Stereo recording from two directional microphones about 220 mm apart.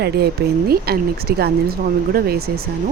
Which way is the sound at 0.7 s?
45° right (ahead or behind).